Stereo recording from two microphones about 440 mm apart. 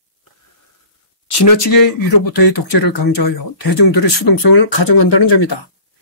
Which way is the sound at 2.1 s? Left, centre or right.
Left.